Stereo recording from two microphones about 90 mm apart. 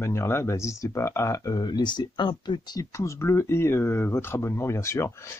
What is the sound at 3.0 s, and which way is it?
Speech, 35° left (ahead or behind).